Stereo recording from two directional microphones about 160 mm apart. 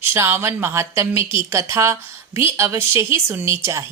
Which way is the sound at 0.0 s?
15° right (ahead or behind).